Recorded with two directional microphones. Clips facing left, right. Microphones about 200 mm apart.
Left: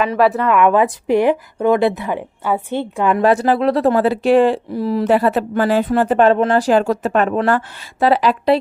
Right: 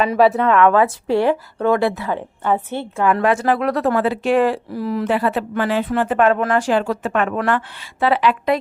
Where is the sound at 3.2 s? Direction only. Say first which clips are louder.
Left 3 dB; 35° left (ahead or behind).